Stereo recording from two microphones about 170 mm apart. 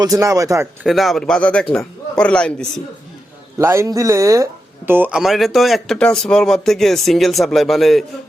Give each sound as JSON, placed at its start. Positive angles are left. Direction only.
{"t": 0.0, "sound": "speech", "side_deg": -20}
{"t": 0.9, "sound": "speech", "side_deg": 0}
{"t": 3.6, "sound": "speech", "side_deg": -15}